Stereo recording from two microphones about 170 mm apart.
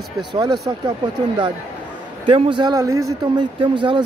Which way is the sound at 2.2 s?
30° right (ahead or behind).